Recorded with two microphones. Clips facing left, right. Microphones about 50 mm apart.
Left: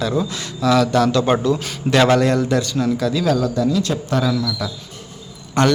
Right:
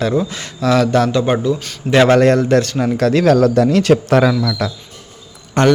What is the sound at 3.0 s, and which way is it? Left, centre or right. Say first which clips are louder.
Speech: right 11 dB; right.